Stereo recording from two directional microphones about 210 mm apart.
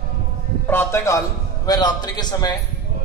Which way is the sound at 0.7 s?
10° left (ahead or behind).